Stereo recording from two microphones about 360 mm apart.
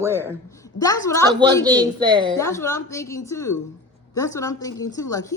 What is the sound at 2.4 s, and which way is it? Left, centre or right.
A woman's voice, centre.